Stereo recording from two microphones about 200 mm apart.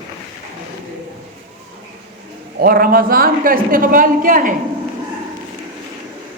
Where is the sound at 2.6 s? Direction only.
45° right (ahead or behind).